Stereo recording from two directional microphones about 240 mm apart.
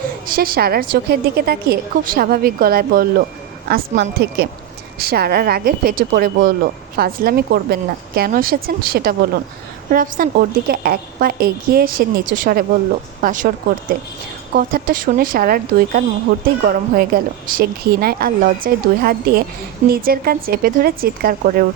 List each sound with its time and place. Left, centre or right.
0.3 s a woman's voice: right
14.5 s a woman's voice: right